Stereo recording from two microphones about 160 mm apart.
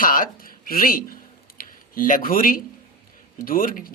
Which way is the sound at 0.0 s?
60° left (ahead or behind).